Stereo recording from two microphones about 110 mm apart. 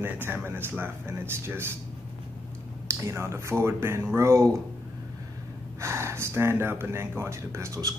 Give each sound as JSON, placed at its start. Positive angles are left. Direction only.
{"t": 0.0, "sound": "speech", "side_deg": -20}
{"t": 2.9, "sound": "speech", "side_deg": -25}
{"t": 5.8, "sound": "speech", "side_deg": -25}